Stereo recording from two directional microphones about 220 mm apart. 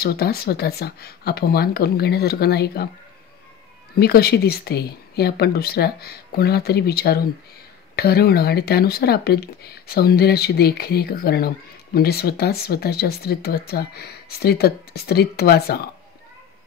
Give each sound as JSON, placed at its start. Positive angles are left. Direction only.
{"t": 0.0, "sound": "speech", "side_deg": 45}
{"t": 4.0, "sound": "speech", "side_deg": 45}